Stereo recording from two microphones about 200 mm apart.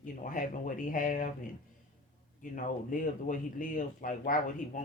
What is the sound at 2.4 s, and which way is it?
Speech, 40° left (ahead or behind).